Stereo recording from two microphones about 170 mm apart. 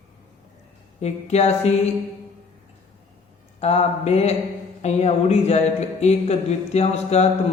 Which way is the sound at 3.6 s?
40° left (ahead or behind).